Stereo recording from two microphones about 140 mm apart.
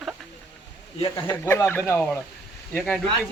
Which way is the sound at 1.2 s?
15° left (ahead or behind).